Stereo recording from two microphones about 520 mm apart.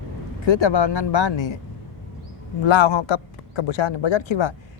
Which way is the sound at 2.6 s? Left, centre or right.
Left.